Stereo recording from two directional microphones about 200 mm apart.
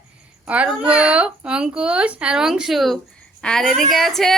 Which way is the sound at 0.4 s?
5° right (ahead or behind).